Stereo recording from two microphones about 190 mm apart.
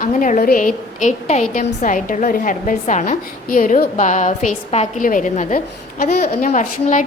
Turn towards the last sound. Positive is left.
turn(degrees=40)  # may be behind; listen again after turning